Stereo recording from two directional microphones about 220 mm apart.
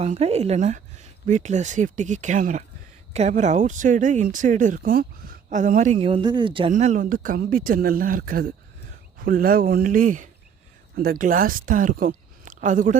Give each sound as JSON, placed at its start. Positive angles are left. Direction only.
{"t": 0.0, "sound": "speech", "side_deg": -30}